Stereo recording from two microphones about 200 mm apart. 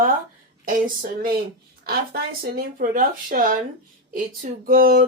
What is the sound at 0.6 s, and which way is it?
A woman's voice, 45° right (ahead or behind).